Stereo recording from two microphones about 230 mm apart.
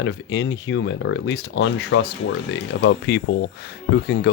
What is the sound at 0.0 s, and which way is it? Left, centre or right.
Speech, left.